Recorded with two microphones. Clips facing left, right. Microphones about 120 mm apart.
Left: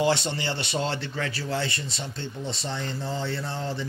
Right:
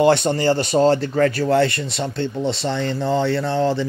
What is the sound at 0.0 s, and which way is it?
Speech, 55° right (ahead or behind).